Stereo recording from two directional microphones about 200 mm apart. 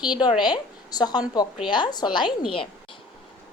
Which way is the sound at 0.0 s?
20° left (ahead or behind).